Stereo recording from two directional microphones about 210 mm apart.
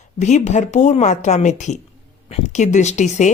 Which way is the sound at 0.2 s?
35° left (ahead or behind).